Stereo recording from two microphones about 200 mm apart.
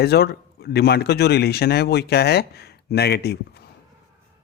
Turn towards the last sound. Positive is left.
turn(degrees=55)  # may be behind; listen again after turning